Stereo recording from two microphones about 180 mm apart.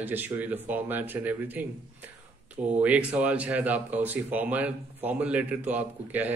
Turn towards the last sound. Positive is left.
turn(degrees=-10)  # may be behind; listen again after turning